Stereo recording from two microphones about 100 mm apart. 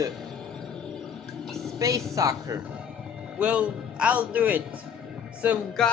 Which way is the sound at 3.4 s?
10° right (ahead or behind).